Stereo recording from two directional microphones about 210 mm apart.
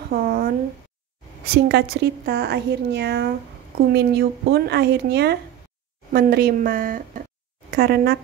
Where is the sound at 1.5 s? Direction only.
50° right (ahead or behind).